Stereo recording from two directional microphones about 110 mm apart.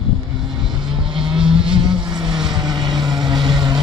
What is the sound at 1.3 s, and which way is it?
Vehicle, 5° right (ahead or behind).